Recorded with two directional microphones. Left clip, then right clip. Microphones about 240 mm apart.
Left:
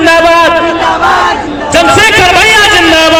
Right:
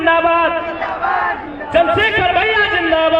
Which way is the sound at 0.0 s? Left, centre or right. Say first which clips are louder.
Left 8 dB; right.